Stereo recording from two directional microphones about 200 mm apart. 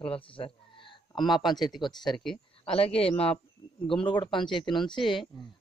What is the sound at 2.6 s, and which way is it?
Speech, 30° left (ahead or behind).